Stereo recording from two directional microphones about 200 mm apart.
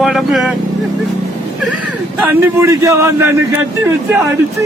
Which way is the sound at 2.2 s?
10° right (ahead or behind).